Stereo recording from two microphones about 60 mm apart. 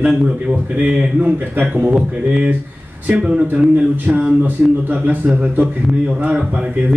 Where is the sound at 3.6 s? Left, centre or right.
Right.